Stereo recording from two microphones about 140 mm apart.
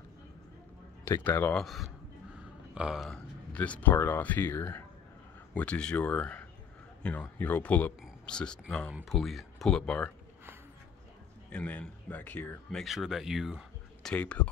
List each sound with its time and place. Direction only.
1.0 s a man's voice: 15° left (ahead or behind)
1.6 s speech: centre (ahead or behind)
3.5 s a man's voice: 10° left (ahead or behind)
11.5 s a man's voice: 10° left (ahead or behind)
12.8 s speech: centre (ahead or behind)
14.1 s a man's voice: 10° left (ahead or behind)